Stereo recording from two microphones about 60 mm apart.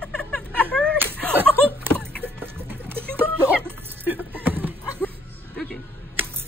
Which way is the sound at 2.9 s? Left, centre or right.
Right.